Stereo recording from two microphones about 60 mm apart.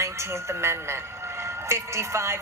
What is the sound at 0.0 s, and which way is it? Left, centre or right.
A woman's voice, right.